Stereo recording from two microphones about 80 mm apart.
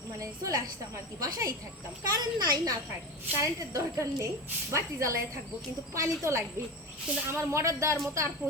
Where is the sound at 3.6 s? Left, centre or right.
Right.